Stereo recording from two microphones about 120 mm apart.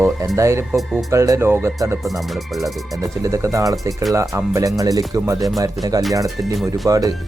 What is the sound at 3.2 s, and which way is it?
Speech, 25° right (ahead or behind).